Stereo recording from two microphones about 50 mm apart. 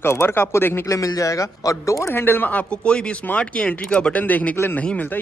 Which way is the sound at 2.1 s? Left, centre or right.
Left.